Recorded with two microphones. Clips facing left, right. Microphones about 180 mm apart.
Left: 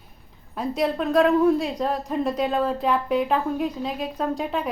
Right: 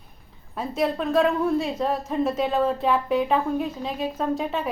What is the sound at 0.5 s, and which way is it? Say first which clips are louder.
A woman's voice: left 1 dB; centre (ahead or behind).